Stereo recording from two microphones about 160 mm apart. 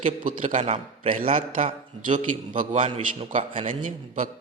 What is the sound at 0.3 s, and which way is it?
A man's voice, 50° right (ahead or behind).